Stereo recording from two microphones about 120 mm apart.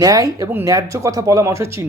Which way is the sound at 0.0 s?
30° right (ahead or behind).